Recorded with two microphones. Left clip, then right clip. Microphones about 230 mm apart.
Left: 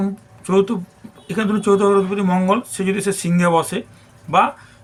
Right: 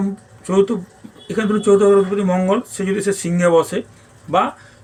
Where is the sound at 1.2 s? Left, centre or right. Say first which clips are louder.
Right 2 dB; left.